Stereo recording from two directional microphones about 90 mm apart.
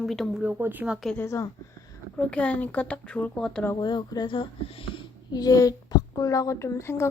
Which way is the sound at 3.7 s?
55° left (ahead or behind).